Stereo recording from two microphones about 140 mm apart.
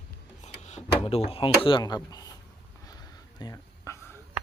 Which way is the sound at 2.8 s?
25° left (ahead or behind).